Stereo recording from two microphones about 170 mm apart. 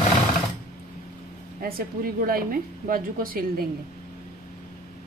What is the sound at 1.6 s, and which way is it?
A woman's voice, 60° right (ahead or behind).